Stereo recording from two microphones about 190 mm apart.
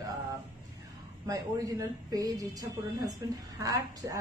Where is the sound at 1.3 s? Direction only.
20° right (ahead or behind).